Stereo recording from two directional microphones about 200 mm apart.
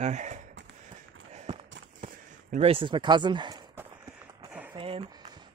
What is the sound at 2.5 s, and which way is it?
Speech, 30° right (ahead or behind).